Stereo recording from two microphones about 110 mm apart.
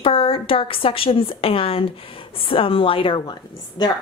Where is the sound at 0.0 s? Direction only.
55° left (ahead or behind).